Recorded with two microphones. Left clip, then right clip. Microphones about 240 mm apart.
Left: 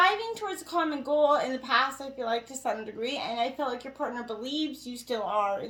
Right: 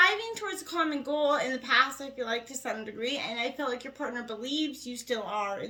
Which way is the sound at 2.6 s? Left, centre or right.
Right.